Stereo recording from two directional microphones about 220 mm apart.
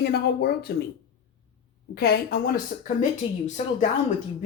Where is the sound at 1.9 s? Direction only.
45° left (ahead or behind).